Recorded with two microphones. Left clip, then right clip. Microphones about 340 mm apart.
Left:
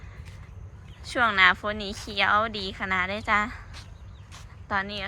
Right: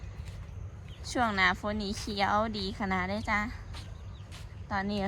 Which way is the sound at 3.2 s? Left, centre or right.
Centre.